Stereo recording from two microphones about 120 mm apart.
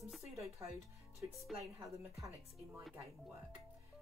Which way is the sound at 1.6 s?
25° right (ahead or behind).